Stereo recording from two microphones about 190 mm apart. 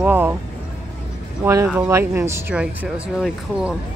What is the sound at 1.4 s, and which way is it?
Speech, 15° right (ahead or behind).